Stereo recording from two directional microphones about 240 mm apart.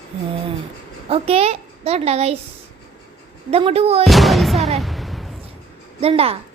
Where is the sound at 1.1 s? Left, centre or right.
Right.